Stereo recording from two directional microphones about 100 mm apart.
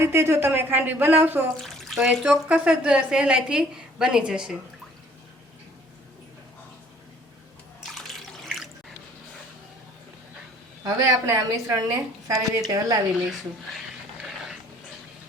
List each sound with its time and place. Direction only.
0.0 s speech: 25° right (ahead or behind)
1.6 s speech: centre (ahead or behind)
2.5 s a woman's voice: 10° right (ahead or behind)
7.9 s water: centre (ahead or behind)
10.8 s a woman's voice: 35° right (ahead or behind)